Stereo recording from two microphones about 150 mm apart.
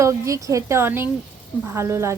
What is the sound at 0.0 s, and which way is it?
A woman's voice, 20° right (ahead or behind).